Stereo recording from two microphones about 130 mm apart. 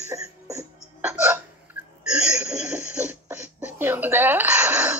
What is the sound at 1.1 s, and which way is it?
Hiccup, 10° right (ahead or behind).